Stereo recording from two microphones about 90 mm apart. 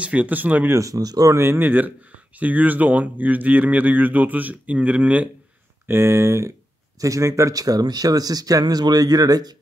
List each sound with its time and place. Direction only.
0.0 s speech: 15° right (ahead or behind)
0.7 s speech: 40° right (ahead or behind); by 5.3 s 15° right (ahead or behind)
5.9 s speech: 30° right (ahead or behind); by 9.6 s 45° right (ahead or behind)